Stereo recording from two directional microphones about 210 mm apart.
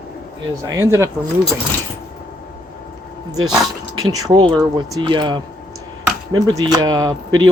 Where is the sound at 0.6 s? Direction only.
15° right (ahead or behind).